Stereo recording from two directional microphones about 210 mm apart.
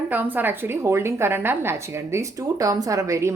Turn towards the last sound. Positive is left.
turn(degrees=-15)  # may be behind; listen again after turning